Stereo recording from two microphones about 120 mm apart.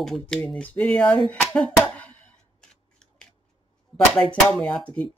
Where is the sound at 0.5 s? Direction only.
10° left (ahead or behind).